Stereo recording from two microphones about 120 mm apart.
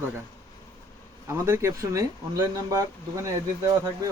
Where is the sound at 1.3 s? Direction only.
20° right (ahead or behind).